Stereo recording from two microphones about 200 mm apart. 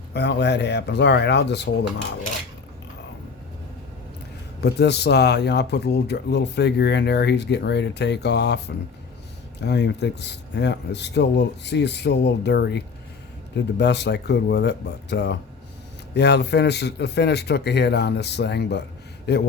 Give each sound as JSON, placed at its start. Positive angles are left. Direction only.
{"t": 0.1, "sound": "speech", "side_deg": 55}
{"t": 4.6, "sound": "speech", "side_deg": 55}